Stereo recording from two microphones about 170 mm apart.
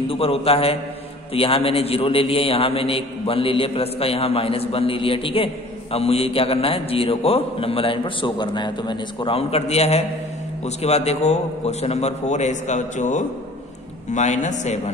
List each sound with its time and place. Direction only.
0.1 s a man's voice: 35° left (ahead or behind)